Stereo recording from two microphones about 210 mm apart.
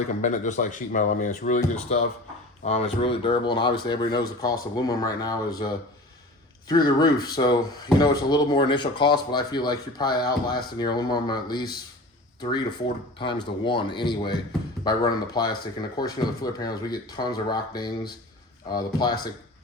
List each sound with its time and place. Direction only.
0.2 s speech: 35° left (ahead or behind); by 19.3 s 20° left (ahead or behind)